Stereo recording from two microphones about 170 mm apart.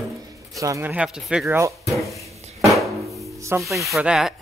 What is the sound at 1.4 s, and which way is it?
Speech, 15° right (ahead or behind).